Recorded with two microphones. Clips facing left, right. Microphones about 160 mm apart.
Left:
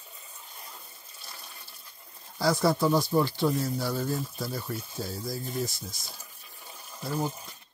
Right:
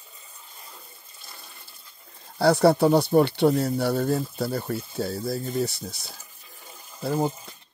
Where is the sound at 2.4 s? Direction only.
65° right (ahead or behind).